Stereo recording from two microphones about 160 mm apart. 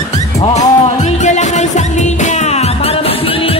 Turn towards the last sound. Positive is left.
turn(degrees=35)  # may be behind; listen again after turning